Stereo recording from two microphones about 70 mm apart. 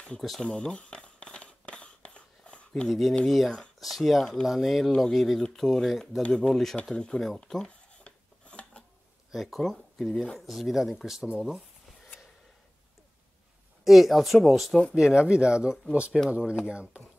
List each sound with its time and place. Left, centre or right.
0.4 s a sound: centre
2.9 s speech: centre
8.0 s a sound: centre
9.3 s speech: centre
10.4 s speech: centre
13.8 s speech: centre
15.0 s speech: centre